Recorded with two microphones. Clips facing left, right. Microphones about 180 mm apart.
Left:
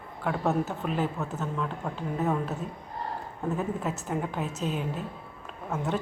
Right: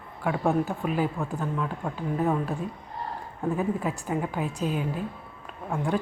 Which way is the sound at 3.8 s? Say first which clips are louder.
Right 2 dB; centre (ahead or behind).